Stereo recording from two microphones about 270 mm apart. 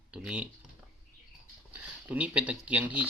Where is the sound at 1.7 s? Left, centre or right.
Centre.